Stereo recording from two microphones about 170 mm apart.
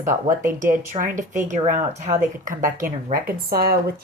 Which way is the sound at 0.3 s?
50° right (ahead or behind).